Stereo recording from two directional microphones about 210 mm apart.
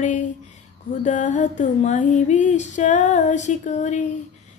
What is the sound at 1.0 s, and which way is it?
Music, 35° left (ahead or behind).